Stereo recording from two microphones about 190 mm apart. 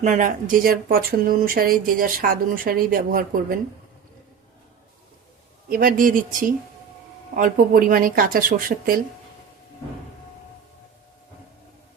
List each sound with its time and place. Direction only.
0.0 s speech: 40° right (ahead or behind)
5.6 s speech: 50° right (ahead or behind)